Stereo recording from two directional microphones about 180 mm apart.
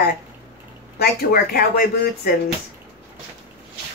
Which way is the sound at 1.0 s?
55° left (ahead or behind).